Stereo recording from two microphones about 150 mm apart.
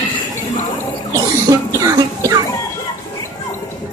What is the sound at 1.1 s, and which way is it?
Music, 20° right (ahead or behind).